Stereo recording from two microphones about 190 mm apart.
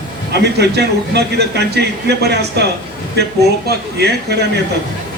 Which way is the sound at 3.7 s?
60° right (ahead or behind).